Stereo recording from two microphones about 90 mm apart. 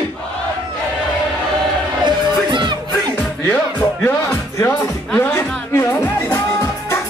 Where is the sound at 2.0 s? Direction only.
60° right (ahead or behind).